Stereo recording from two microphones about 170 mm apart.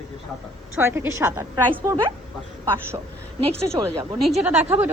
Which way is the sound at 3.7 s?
25° right (ahead or behind).